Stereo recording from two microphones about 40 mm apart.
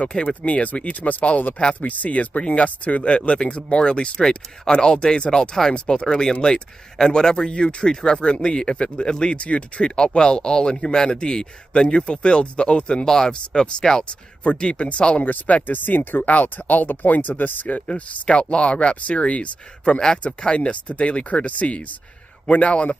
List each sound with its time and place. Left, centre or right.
0.2 s speech: left
9.4 s speech: left
14.4 s speech: left
15.2 s speech: left
16.3 s speech: left
17.8 s speech: left